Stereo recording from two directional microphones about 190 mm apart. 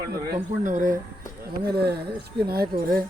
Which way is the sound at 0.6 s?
45° right (ahead or behind).